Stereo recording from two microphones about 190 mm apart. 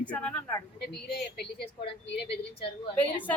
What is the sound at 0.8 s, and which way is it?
Speech, 60° left (ahead or behind).